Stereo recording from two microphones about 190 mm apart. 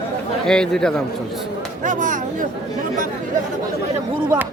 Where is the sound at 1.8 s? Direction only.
40° right (ahead or behind).